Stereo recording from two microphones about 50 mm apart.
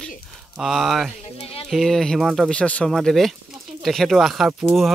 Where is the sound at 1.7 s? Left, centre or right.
Centre.